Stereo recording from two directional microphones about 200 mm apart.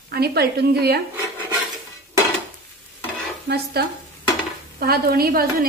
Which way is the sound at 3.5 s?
50° right (ahead or behind).